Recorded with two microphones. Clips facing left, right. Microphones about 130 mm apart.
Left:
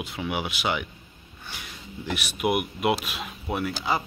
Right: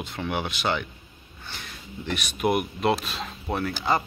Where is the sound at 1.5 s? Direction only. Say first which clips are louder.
Right 1 dB; 10° left (ahead or behind).